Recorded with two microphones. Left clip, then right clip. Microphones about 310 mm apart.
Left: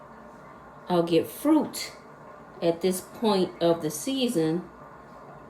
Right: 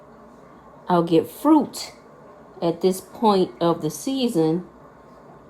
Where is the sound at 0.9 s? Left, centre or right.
Right.